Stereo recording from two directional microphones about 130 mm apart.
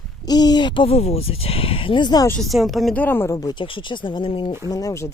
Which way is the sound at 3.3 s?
35° left (ahead or behind).